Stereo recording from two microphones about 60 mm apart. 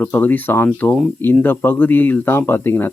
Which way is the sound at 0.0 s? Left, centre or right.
Left.